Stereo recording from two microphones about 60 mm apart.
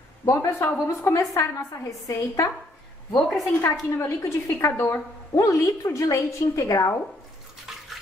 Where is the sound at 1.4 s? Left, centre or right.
Left.